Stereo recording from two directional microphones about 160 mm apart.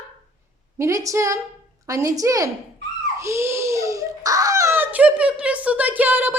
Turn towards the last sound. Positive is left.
turn(degrees=-10)  # may be behind; listen again after turning